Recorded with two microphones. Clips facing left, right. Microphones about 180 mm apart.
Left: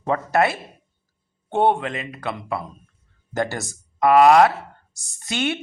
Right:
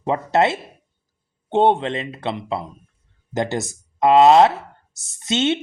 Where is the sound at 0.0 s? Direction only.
20° right (ahead or behind).